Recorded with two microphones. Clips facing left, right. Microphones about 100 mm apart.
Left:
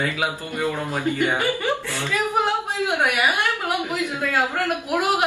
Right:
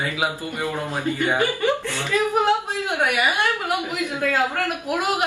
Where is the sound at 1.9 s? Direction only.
15° left (ahead or behind).